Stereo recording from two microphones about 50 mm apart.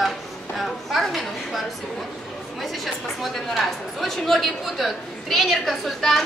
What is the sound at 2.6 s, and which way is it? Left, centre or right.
Speech, centre.